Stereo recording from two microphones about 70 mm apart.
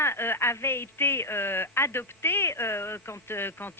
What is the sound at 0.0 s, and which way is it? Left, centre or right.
Speech, left.